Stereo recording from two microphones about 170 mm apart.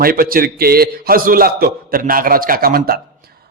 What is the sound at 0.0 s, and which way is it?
A man's voice, 55° right (ahead or behind).